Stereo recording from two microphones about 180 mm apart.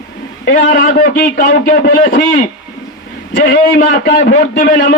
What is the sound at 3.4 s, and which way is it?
A man's voice, 60° left (ahead or behind).